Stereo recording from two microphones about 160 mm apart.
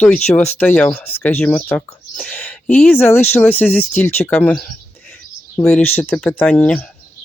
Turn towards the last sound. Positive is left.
turn(degrees=10)  # may be behind; listen again after turning